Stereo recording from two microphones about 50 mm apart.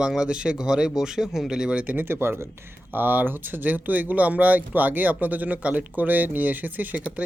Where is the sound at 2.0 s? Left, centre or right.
Right.